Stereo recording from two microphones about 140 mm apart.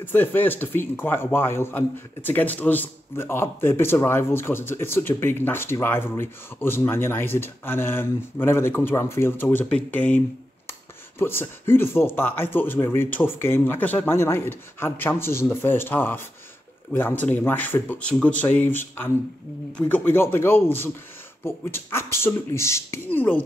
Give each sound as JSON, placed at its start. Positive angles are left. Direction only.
{"t": 0.0, "sound": "a man's voice", "side_deg": 15}
{"t": 10.7, "sound": "a sound", "side_deg": 15}
{"t": 11.7, "sound": "a man's voice", "side_deg": 15}